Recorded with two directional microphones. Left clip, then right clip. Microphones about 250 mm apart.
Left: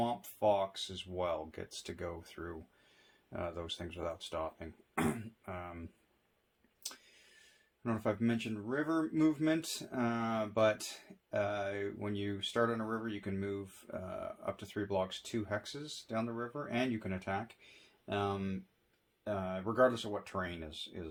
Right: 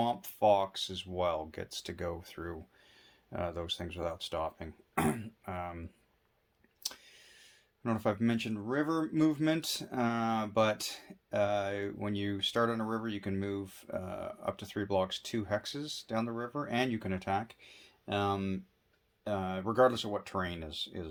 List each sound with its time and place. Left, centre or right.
0.0 s speech: right
6.8 s a sound: right
7.9 s speech: right